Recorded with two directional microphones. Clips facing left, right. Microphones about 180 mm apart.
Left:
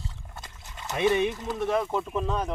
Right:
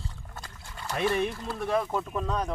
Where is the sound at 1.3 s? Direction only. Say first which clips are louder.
Left 3 dB; 20° left (ahead or behind).